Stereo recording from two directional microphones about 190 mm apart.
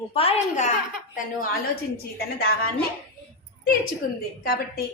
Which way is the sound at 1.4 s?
55° left (ahead or behind).